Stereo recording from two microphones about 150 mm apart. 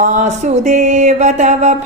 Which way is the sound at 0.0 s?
50° right (ahead or behind).